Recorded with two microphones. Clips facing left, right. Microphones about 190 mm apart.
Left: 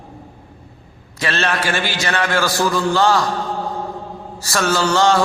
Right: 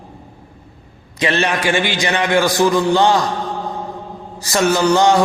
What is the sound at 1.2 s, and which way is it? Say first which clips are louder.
A man's voice: right 3 dB; 15° right (ahead or behind).